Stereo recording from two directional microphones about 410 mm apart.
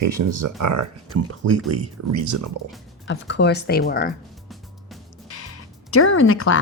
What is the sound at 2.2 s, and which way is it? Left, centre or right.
Speech, right.